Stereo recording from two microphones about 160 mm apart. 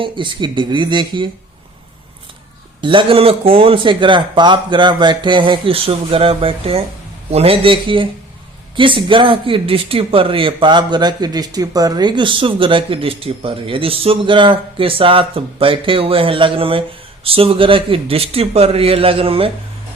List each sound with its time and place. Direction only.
0.0 s speech: 30° right (ahead or behind)
2.8 s speech: 35° right (ahead or behind)